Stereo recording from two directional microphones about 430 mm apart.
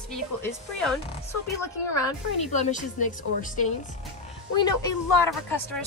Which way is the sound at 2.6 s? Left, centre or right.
Centre.